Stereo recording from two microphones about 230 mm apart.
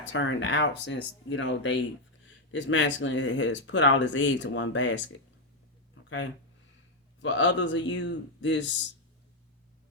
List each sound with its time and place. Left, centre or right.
0.0 s speech: left
5.9 s a sound: left
7.2 s speech: left